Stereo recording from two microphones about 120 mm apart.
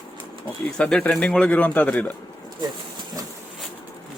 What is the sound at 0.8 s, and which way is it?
Speech, 10° left (ahead or behind).